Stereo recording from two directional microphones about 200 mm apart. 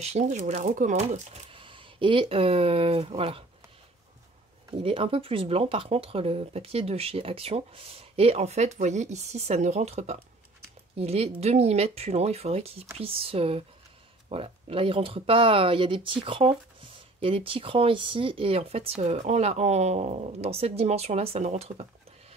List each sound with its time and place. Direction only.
0.0 s speech: 35° right (ahead or behind)
4.6 s speech: 25° right (ahead or behind)